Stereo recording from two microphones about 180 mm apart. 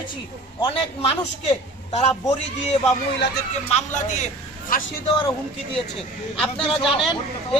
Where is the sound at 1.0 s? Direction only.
35° left (ahead or behind).